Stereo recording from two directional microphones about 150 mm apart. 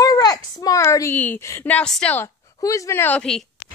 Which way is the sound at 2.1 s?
20° left (ahead or behind).